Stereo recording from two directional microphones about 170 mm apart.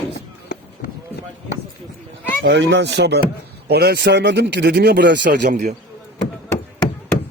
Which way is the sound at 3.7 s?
70° right (ahead or behind).